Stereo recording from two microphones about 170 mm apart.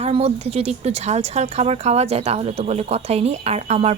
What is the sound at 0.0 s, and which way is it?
Speech, 35° right (ahead or behind).